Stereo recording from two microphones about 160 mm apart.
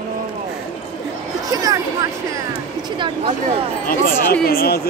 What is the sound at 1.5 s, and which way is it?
Speech, 25° right (ahead or behind).